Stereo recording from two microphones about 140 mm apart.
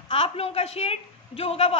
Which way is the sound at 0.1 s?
45° left (ahead or behind).